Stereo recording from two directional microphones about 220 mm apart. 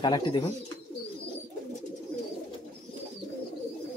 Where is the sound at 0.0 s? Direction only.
20° left (ahead or behind).